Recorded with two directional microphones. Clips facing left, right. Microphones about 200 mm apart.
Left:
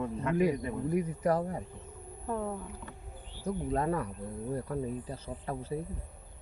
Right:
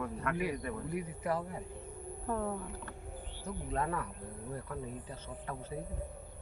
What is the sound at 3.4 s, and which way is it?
Speech, 35° left (ahead or behind).